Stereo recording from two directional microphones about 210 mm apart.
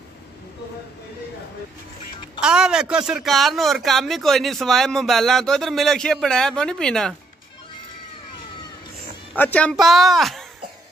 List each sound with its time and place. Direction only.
2.4 s speech: 5° right (ahead or behind)
9.3 s speech: 5° left (ahead or behind)